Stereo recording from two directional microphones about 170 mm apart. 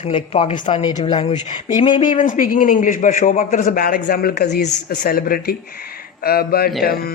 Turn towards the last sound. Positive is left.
turn(degrees=60)  # may be behind; listen again after turning